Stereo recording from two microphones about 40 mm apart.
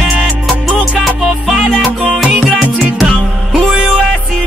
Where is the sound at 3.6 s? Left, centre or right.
Right.